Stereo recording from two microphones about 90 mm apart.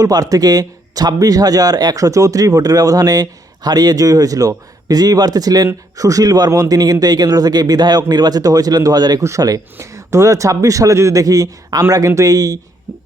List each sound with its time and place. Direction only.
0.0 s speech: 45° right (ahead or behind)